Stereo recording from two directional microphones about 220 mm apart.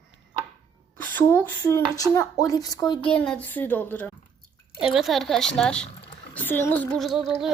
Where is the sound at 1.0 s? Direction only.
10° left (ahead or behind).